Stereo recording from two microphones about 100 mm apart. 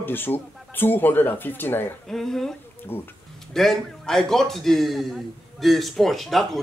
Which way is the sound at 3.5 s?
5° left (ahead or behind).